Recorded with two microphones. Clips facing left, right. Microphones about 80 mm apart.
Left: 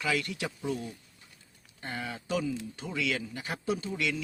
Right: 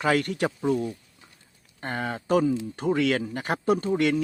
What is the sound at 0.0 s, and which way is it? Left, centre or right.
Speech, right.